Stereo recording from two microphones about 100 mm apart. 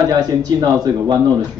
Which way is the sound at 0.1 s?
45° right (ahead or behind).